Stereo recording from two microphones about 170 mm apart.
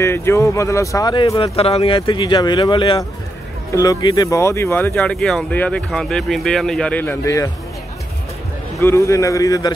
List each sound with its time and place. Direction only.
0.0 s speech: 15° left (ahead or behind)
3.7 s speech: 20° left (ahead or behind)
8.7 s speech: 15° left (ahead or behind)